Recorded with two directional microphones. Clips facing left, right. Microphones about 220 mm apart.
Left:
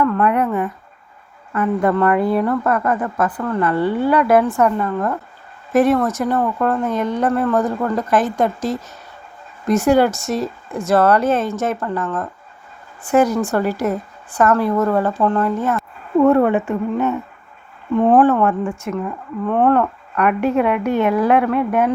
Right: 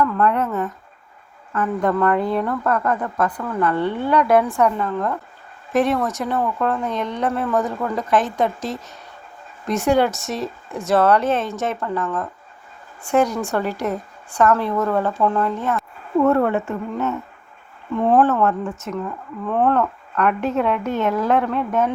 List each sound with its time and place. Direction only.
0.2 s a woman's voice: 15° left (ahead or behind)
16.1 s a woman's voice: 15° left (ahead or behind)
18.4 s a woman's voice: 15° left (ahead or behind)
19.5 s a woman's voice: centre (ahead or behind)